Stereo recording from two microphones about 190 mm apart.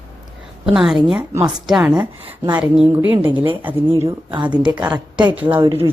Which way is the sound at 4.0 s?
20° right (ahead or behind).